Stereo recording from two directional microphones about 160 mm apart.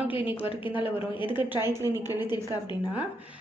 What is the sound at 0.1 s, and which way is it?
A woman's voice, 30° left (ahead or behind).